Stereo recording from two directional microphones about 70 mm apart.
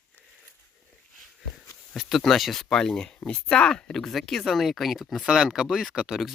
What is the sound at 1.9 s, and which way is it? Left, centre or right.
Speech, centre.